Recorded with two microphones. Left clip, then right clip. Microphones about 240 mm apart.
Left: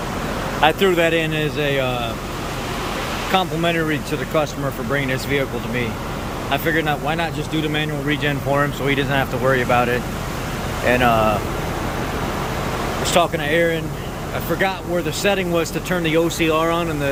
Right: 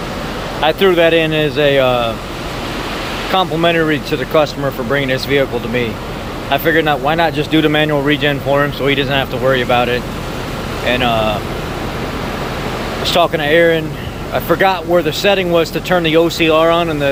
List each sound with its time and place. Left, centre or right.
0.6 s speech: centre
3.3 s speech: centre
13.1 s speech: centre